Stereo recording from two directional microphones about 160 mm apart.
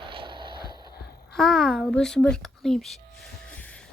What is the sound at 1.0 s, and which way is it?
Babbling, 80° left.